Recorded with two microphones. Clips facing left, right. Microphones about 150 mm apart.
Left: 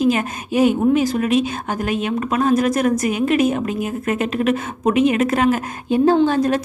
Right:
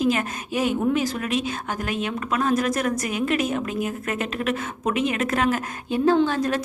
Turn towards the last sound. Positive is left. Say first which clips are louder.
# left 5 dB
turn(degrees=20)  # may be behind; listen again after turning